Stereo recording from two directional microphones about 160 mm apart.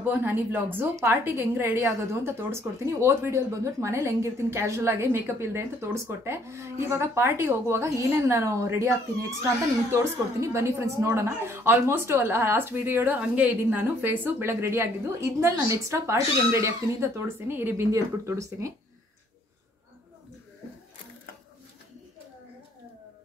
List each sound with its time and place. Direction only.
0.0 s a woman's voice: 15° right (ahead or behind)
10.4 s a woman's voice: 20° right (ahead or behind)